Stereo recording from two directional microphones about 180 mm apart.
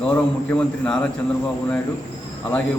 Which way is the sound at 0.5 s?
5° left (ahead or behind).